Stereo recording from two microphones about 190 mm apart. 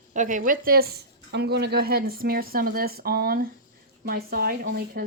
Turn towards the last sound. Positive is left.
turn(degrees=-50)  # may be behind; listen again after turning